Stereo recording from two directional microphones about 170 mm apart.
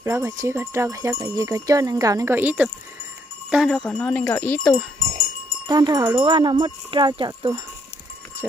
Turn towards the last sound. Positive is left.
turn(degrees=-25)  # may be behind; listen again after turning